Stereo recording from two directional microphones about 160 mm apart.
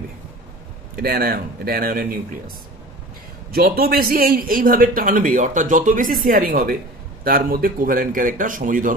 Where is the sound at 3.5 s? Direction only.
70° right (ahead or behind).